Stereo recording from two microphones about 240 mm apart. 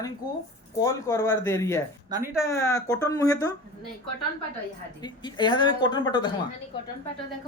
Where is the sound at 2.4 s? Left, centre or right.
Centre.